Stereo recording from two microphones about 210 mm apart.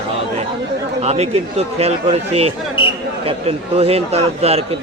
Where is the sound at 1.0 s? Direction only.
30° right (ahead or behind).